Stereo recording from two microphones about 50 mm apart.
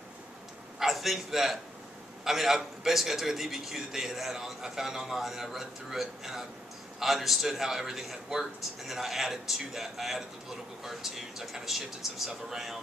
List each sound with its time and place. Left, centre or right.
0.7 s a man's voice: centre